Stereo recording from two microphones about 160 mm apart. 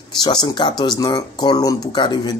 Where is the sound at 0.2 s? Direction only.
25° left (ahead or behind).